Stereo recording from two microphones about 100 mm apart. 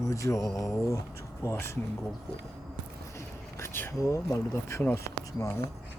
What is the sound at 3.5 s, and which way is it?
Speech, 25° left (ahead or behind).